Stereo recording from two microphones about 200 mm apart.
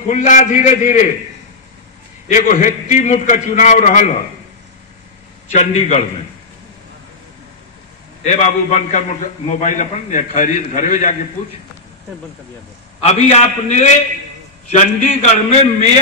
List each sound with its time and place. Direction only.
0.1 s a man's voice: 35° left (ahead or behind)
2.2 s a man's voice: 40° left (ahead or behind)
5.5 s a man's voice: 35° left (ahead or behind)
8.2 s a man's voice: 35° left (ahead or behind)
13.0 s a man's voice: 30° left (ahead or behind)
15.2 s a man's voice: 30° left (ahead or behind)